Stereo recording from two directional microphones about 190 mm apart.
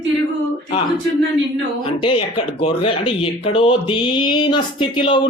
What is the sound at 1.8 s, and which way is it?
Speech, 25° left (ahead or behind).